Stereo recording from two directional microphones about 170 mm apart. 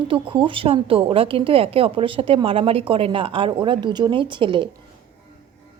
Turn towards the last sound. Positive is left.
turn(degrees=-30)  # may be behind; listen again after turning